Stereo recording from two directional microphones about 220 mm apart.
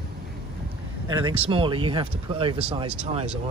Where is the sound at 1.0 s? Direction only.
20° right (ahead or behind).